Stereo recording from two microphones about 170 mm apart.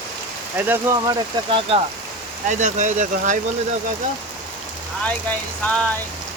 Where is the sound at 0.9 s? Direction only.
10° right (ahead or behind).